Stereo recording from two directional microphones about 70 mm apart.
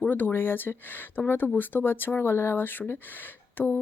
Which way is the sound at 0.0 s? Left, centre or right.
Left.